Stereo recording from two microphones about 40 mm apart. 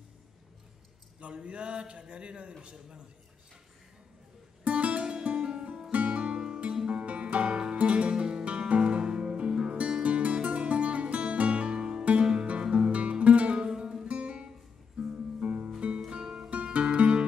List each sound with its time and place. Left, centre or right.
1.2 s a man's voice: right
4.6 s music: right
5.0 s music: right
5.9 s music: right
6.3 s music: centre
6.9 s music: right
13.6 s music: right
14.0 s music: right
16.1 s music: right